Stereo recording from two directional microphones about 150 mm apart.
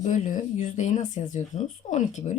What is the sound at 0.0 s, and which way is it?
Speech, 60° left (ahead or behind).